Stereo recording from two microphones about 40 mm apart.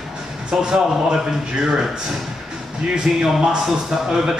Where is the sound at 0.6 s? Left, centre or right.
Centre.